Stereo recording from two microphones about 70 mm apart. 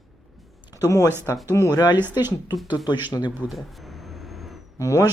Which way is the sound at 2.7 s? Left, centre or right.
Left.